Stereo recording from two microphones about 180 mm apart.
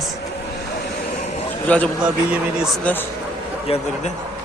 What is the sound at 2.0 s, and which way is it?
A man's voice, 5° right (ahead or behind).